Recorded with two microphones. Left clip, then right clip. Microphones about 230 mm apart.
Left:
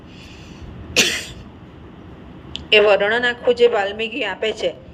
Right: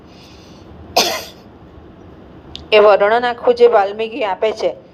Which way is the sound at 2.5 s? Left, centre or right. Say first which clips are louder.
Right 4 dB; right.